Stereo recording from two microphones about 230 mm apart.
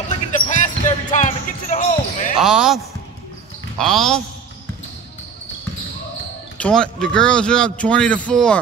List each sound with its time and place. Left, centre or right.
0.5 s basketball bounce: left
2.4 s a man's voice: centre
6.6 s a man's voice: centre